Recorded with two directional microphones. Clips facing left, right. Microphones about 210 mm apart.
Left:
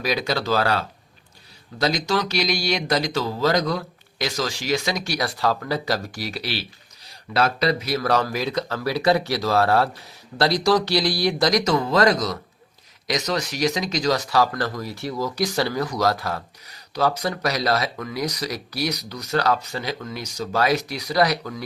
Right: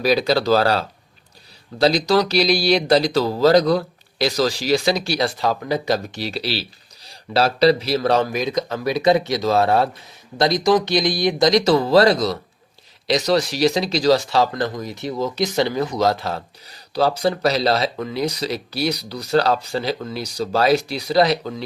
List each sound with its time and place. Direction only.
0.0 s speech: 35° right (ahead or behind)
5.4 s speech: 20° right (ahead or behind)